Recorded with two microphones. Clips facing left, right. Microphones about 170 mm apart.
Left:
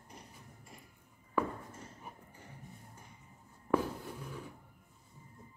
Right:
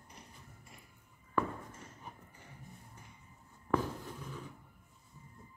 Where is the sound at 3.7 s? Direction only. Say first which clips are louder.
Left 2 dB; 10° left (ahead or behind).